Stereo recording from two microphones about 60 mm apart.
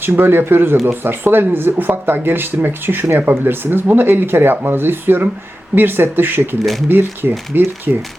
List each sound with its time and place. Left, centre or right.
0.0 s speech: right